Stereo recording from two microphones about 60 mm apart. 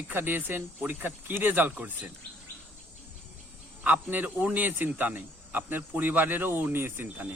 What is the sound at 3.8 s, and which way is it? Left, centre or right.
Speech, right.